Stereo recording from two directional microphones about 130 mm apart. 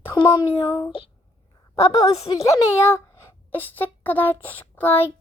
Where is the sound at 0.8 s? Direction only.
40° left (ahead or behind).